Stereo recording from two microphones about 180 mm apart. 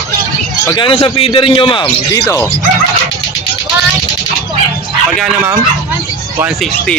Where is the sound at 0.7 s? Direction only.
30° left (ahead or behind).